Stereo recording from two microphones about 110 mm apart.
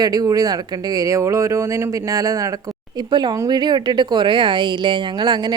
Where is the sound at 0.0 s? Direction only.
35° right (ahead or behind).